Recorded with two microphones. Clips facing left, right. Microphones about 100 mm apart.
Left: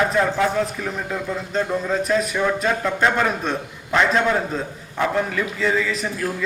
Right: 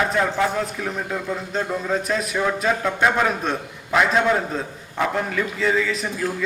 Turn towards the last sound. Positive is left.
turn(degrees=0)  # may be behind; listen again after turning